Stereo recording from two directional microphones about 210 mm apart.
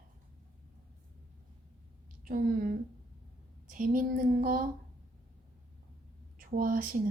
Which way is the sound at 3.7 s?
40° right (ahead or behind).